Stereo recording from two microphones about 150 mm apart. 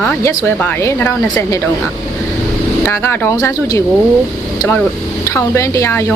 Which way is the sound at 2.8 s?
15° left (ahead or behind).